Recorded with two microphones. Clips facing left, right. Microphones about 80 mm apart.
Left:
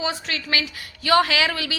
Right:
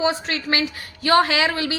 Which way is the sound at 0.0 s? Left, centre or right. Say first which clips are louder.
Right 5 dB; right.